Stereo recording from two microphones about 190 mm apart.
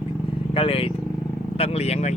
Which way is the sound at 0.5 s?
30° left (ahead or behind).